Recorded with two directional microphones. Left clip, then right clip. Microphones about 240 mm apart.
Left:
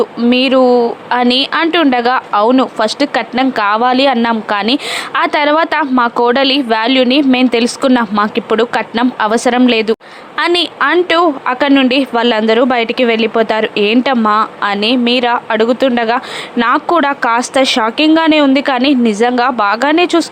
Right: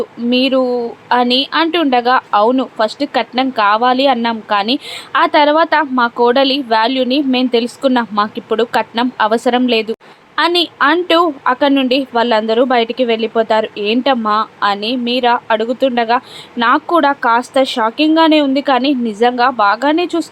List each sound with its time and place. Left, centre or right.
0.0 s speech: left